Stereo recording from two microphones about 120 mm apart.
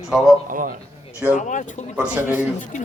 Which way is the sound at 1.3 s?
85° left.